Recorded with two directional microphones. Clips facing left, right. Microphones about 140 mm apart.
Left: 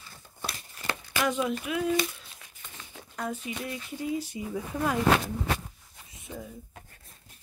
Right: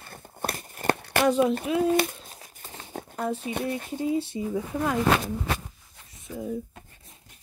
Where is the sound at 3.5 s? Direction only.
55° right (ahead or behind).